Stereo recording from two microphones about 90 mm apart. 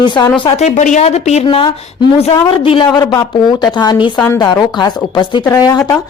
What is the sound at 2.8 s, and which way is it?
Speech, 40° left (ahead or behind).